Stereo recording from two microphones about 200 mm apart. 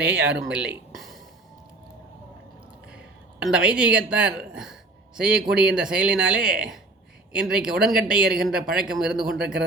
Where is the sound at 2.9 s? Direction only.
5° right (ahead or behind).